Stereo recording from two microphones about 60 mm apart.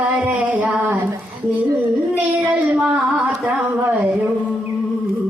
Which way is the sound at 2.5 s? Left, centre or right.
Right.